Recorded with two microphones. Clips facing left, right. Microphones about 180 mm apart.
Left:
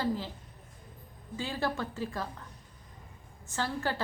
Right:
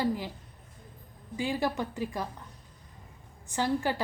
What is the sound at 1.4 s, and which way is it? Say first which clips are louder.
Speech: right 3 dB; 15° right (ahead or behind).